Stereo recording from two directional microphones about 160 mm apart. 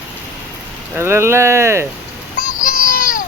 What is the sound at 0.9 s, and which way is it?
Speech, 15° right (ahead or behind).